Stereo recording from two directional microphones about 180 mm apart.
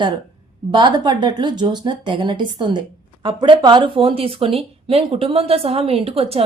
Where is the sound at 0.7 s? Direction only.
25° right (ahead or behind).